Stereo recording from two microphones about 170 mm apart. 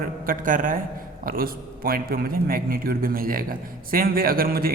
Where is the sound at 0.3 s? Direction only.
50° right (ahead or behind).